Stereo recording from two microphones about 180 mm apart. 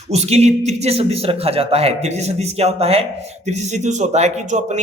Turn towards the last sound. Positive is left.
turn(degrees=-40)  # may be behind; listen again after turning